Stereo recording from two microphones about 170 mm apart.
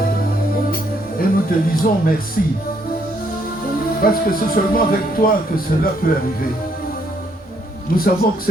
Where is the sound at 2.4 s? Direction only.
60° left (ahead or behind).